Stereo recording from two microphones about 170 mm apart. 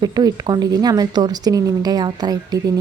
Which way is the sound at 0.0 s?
25° right (ahead or behind).